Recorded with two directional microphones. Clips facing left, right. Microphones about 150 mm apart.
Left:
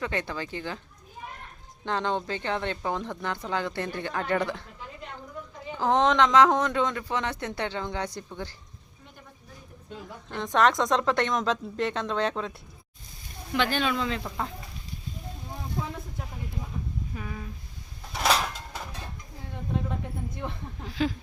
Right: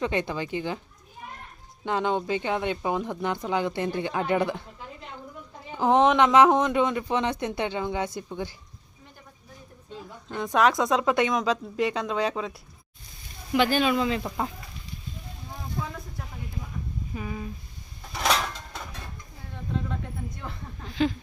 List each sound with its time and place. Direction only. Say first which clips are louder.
0.0 s speech: right 4 dB; 15° right (ahead or behind)
1.8 s speech: right 2 dB; 10° right (ahead or behind)
5.8 s speech: right 3 dB; 15° right (ahead or behind)
10.2 s speech: right 1 dB; 5° right (ahead or behind)
17.2 s speech: right 4 dB; 10° right (ahead or behind)
18.1 s a sound: even; 5° left (ahead or behind)
20.4 s speech: left 4 dB; 20° left (ahead or behind)
20.8 s speech: right 3 dB; 5° left (ahead or behind)